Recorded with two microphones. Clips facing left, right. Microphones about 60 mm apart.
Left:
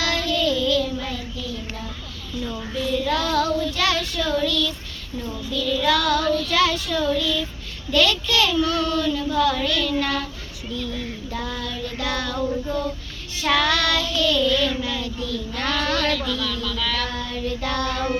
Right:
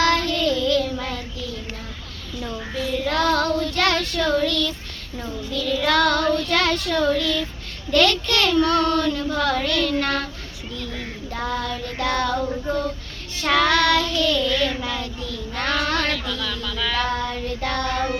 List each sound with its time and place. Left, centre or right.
0.0 s child singing: right
2.8 s child singing: right
13.4 s child singing: right